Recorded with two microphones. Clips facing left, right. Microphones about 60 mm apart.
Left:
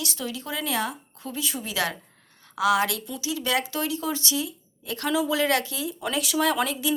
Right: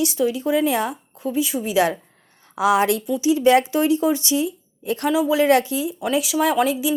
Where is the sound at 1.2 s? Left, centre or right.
Centre.